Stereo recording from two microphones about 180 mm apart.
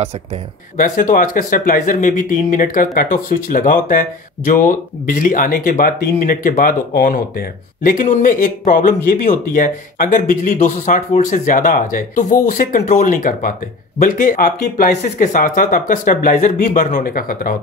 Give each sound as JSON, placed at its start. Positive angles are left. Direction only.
{"t": 0.7, "sound": "speech", "side_deg": 50}